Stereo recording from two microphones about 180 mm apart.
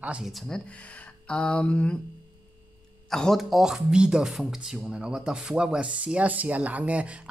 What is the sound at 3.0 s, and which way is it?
Speech, centre (ahead or behind).